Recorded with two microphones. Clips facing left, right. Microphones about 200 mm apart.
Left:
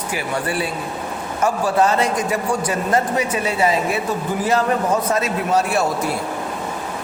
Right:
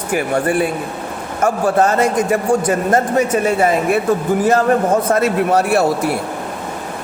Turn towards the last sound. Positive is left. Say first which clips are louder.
# right 5 dB
turn(degrees=-60)  # may be behind; listen again after turning